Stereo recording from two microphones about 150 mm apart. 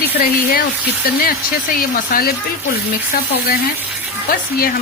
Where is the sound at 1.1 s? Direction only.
80° left.